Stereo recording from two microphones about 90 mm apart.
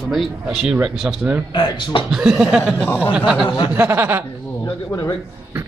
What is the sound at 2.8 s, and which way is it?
Speech, 25° left (ahead or behind).